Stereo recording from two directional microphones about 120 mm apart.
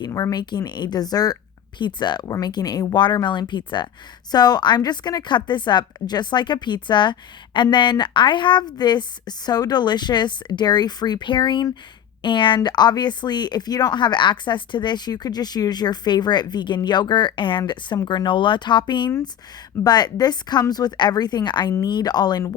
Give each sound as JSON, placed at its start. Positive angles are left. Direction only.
{"t": 0.0, "sound": "speech", "side_deg": 30}